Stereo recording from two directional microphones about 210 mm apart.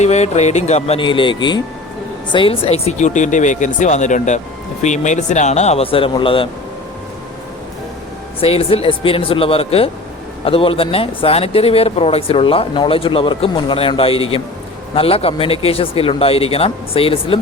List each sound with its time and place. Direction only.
0.0 s speech: 30° left (ahead or behind)
8.4 s speech: 25° left (ahead or behind)